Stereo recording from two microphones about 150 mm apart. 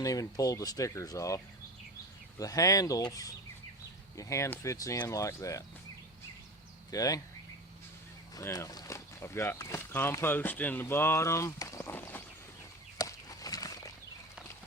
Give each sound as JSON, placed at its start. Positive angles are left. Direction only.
{"t": 0.0, "sound": "speech", "side_deg": 25}
{"t": 2.4, "sound": "speech", "side_deg": 25}
{"t": 6.9, "sound": "speech", "side_deg": 25}
{"t": 8.4, "sound": "speech", "side_deg": 25}
{"t": 13.0, "sound": "a sound", "side_deg": 25}